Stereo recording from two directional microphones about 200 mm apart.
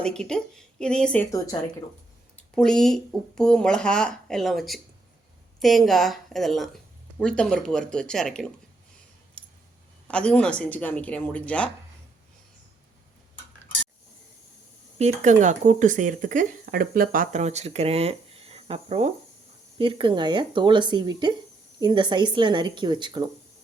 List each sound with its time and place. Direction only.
0.0 s speech: 5° left (ahead or behind)
10.1 s speech: 5° left (ahead or behind)
14.9 s speech: 35° right (ahead or behind)